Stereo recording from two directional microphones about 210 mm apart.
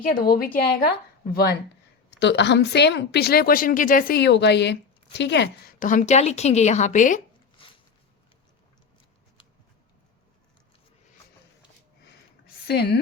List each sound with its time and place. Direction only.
0.1 s a woman's voice: 45° left (ahead or behind)
5.8 s a woman's voice: 35° left (ahead or behind)
7.5 s a sound: 25° left (ahead or behind)
12.6 s a woman's voice: 50° left (ahead or behind)